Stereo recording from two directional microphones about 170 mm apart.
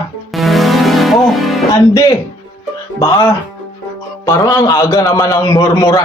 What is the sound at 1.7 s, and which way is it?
A man's voice, 20° left (ahead or behind).